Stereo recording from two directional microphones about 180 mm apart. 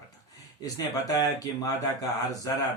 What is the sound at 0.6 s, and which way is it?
Speech, 20° left (ahead or behind).